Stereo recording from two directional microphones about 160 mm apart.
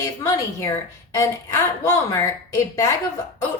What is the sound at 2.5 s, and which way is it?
Speech, 20° left (ahead or behind).